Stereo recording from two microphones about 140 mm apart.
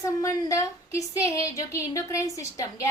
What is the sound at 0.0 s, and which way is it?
A woman's voice, 25° left (ahead or behind).